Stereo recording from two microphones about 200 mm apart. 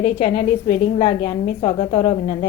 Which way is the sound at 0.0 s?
45° left (ahead or behind).